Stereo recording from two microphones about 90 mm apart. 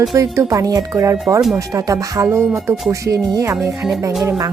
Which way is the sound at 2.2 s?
30° right (ahead or behind).